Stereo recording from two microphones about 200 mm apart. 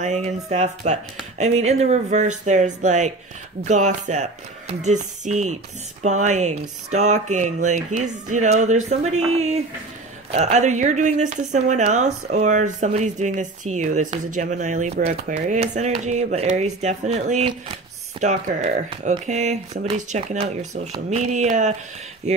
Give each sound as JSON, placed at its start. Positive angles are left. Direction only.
{"t": 0.0, "sound": "speech", "side_deg": -35}